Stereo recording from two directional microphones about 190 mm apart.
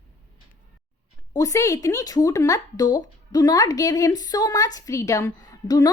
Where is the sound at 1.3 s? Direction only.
15° left (ahead or behind).